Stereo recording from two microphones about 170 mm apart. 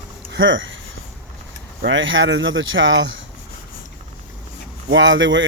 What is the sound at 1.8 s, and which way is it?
Speech, 90° right.